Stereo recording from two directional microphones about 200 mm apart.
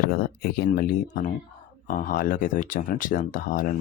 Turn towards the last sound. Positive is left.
turn(degrees=45)  # may be behind; listen again after turning